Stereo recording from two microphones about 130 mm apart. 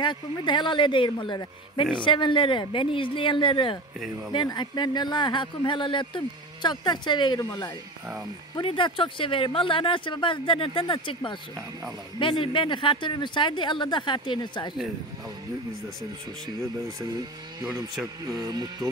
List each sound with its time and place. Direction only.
0.0 s speech: 35° left (ahead or behind)
18.0 s speech: 30° right (ahead or behind)